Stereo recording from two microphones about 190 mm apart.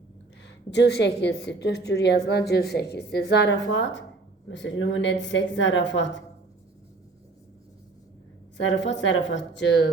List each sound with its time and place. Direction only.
0.4 s a woman's voice: 65° left (ahead or behind)
8.6 s a woman's voice: 70° left (ahead or behind)